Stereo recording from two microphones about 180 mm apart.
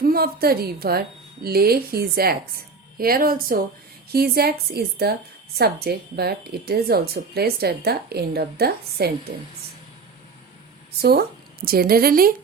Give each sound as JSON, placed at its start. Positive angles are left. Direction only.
{"t": 0.0, "sound": "a woman's voice", "side_deg": -60}
{"t": 11.0, "sound": "a woman's voice", "side_deg": -60}